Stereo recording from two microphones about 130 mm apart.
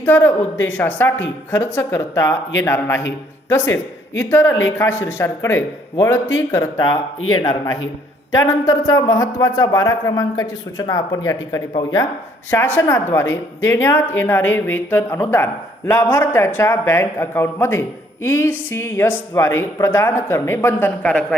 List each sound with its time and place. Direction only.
0.0 s a man's voice: 15° left (ahead or behind)